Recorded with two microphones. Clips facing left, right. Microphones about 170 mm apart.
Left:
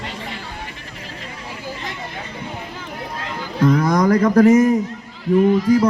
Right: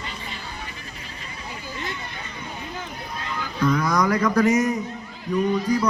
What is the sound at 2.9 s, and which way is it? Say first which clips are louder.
Vehicle: left 5 dB; 90° left.